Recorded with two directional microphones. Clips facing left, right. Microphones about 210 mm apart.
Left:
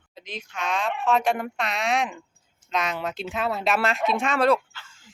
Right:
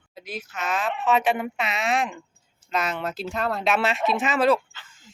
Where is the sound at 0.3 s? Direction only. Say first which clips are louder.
Even; 5° right (ahead or behind).